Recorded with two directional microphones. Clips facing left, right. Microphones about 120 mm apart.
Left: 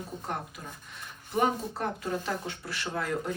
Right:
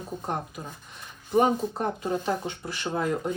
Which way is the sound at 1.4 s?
25° right (ahead or behind).